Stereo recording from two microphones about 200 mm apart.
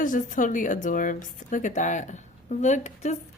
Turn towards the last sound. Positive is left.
turn(degrees=35)  # may be behind; listen again after turning